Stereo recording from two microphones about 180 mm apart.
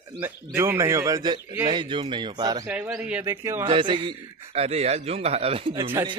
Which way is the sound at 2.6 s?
10° right (ahead or behind).